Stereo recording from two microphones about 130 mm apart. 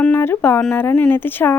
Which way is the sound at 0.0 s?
15° left (ahead or behind).